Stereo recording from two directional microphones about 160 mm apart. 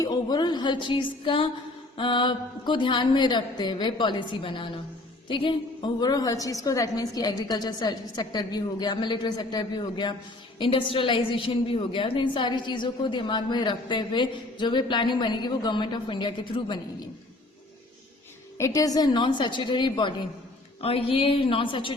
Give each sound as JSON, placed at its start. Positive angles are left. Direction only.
{"t": 0.0, "sound": "a woman's voice", "side_deg": 25}
{"t": 18.5, "sound": "a woman's voice", "side_deg": 20}